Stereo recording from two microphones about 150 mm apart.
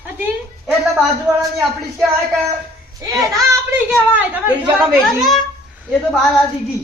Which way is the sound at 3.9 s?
10° right (ahead or behind).